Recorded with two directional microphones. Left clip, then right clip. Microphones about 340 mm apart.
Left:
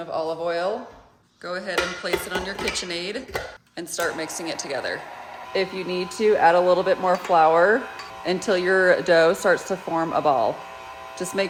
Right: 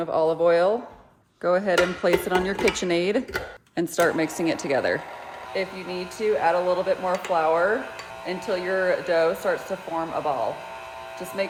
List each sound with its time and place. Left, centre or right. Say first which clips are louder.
0.2 s a woman's voice: right 6 dB; right
1.5 s dishes: right 5 dB; centre
3.8 s a woman's voice: right 5 dB; centre
5.5 s speech: left 4 dB; left